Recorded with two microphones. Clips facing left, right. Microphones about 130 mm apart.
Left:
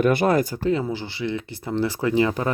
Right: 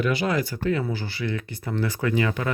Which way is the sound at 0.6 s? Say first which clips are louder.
Left 2 dB; 25° left (ahead or behind).